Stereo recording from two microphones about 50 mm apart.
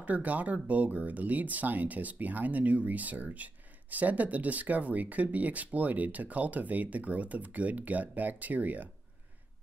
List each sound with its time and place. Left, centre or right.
0.0 s speech: right